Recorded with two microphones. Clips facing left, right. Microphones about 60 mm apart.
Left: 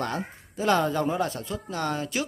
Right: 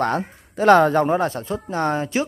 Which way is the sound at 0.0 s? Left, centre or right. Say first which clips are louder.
Right 8 dB; right.